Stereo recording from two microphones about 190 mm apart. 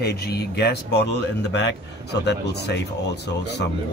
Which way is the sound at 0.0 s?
60° left (ahead or behind).